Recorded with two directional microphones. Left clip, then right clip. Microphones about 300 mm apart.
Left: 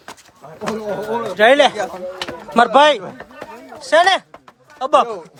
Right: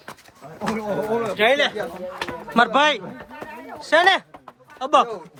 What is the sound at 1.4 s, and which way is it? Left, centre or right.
Speech, left.